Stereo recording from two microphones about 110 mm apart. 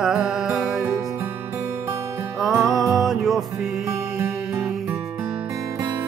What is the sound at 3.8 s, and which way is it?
Music, 30° right (ahead or behind).